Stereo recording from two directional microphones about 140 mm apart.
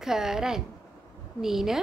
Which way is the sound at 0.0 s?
5° right (ahead or behind).